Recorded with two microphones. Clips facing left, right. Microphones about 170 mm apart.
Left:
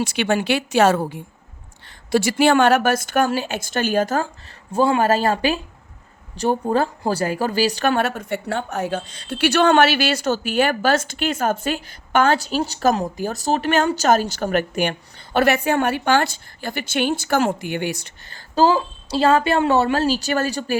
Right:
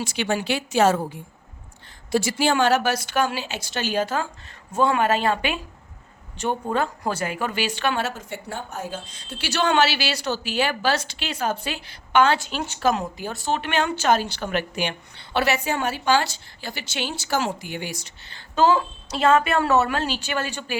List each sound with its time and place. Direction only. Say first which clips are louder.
0.0 s a woman's voice: left 5 dB; 70° left (ahead or behind); by 4.3 s 45° left (ahead or behind)
4.7 s a woman's voice: left 3 dB; 30° left (ahead or behind); by 18.1 s 60° left (ahead or behind)
18.3 s a woman's voice: left 2 dB; 40° left (ahead or behind)